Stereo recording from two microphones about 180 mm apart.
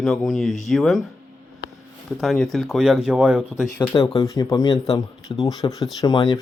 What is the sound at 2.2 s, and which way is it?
Speech, centre (ahead or behind).